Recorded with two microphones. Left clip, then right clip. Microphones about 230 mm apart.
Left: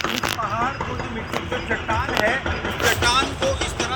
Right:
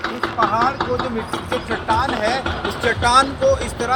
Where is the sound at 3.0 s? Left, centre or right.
Right.